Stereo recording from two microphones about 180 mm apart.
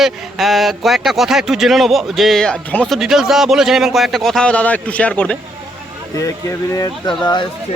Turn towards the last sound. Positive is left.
turn(degrees=25)  # may be behind; listen again after turning